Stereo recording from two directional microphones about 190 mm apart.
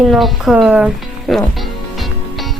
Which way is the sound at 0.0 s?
Centre (ahead or behind).